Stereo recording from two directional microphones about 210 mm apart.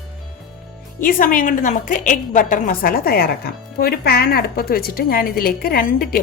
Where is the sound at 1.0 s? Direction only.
40° left (ahead or behind).